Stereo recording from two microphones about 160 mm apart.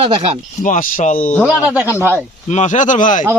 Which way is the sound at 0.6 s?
55° left (ahead or behind).